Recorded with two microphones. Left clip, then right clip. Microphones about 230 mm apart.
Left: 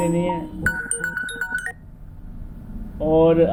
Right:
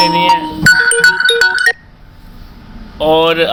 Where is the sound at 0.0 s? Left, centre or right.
Centre.